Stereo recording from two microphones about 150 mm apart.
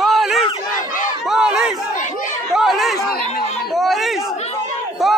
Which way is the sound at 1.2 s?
5° right (ahead or behind).